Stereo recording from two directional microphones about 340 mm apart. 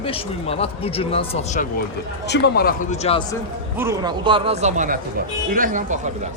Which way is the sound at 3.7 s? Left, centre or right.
Centre.